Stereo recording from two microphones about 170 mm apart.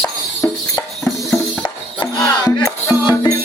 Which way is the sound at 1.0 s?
5° left (ahead or behind).